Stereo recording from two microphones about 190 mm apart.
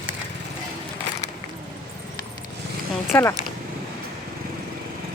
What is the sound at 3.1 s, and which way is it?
Speech, 10° left (ahead or behind).